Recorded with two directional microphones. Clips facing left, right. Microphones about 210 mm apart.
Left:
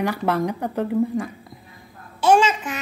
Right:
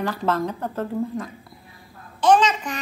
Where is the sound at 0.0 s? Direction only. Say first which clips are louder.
Left 2 dB; 15° left (ahead or behind).